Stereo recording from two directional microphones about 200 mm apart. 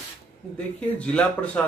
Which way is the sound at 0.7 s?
5° left (ahead or behind).